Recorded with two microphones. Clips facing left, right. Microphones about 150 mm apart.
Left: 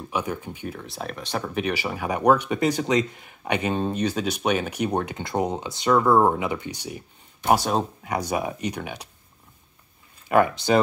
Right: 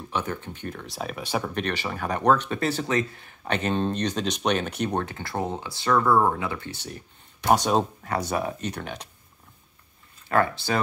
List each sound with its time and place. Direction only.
0.1 s speech: 10° left (ahead or behind); by 1.5 s 10° right (ahead or behind)
1.5 s speech: 10° left (ahead or behind)
7.4 s speech: centre (ahead or behind)
10.2 s speech: 15° left (ahead or behind)